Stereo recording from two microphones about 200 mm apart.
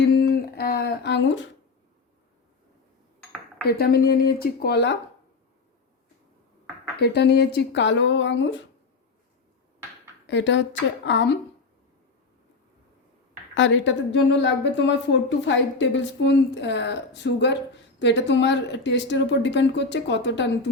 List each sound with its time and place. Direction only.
0.1 s a sound: 55° left (ahead or behind)
3.8 s speech: 50° left (ahead or behind)
7.0 s a woman's voice: 55° left (ahead or behind)
10.2 s a woman's voice: 60° left (ahead or behind)
13.5 s a woman's voice: 65° left (ahead or behind)